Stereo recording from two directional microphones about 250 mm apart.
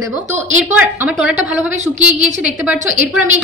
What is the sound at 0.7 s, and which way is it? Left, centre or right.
A woman's voice, centre.